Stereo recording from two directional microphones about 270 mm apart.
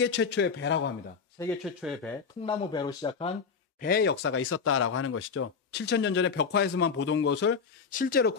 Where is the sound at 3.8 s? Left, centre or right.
Left.